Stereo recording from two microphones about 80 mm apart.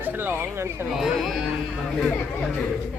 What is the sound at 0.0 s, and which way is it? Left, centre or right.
Speech, right.